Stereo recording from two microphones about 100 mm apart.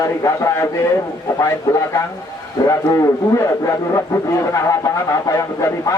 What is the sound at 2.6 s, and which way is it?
Speech, 35° left (ahead or behind).